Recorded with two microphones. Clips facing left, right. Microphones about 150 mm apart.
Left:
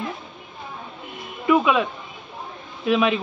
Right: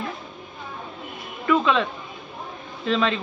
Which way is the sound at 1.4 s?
15° left (ahead or behind).